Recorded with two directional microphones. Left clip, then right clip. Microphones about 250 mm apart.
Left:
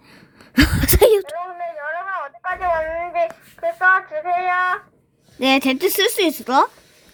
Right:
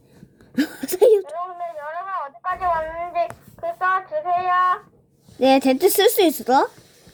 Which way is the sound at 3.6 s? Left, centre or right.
Left.